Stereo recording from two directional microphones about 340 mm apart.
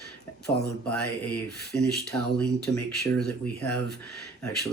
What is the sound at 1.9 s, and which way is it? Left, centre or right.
Speech, centre.